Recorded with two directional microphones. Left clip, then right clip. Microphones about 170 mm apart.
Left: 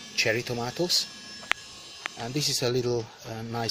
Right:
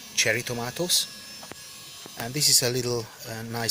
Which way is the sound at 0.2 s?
15° left (ahead or behind).